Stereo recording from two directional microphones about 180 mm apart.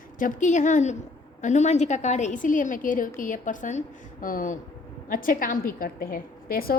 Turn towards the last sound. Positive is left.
turn(degrees=55)  # may be behind; listen again after turning